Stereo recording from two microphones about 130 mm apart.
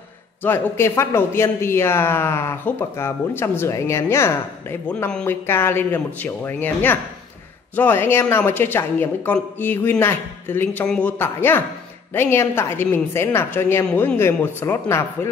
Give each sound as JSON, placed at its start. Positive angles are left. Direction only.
{"t": 0.4, "sound": "speech", "side_deg": 20}